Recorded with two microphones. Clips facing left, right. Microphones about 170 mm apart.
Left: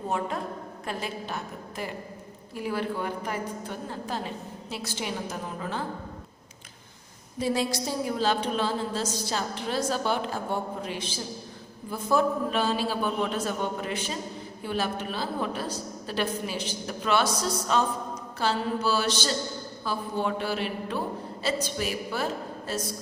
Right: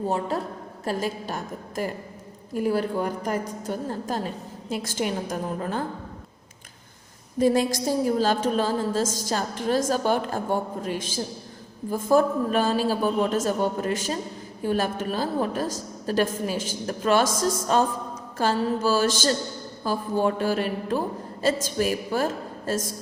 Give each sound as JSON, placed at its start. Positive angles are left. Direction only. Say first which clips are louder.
{"t": 0.1, "sound": "a woman's voice", "louder": "right 3 dB", "side_deg": -35}
{"t": 7.3, "sound": "a woman's voice", "louder": "right 6 dB", "side_deg": -50}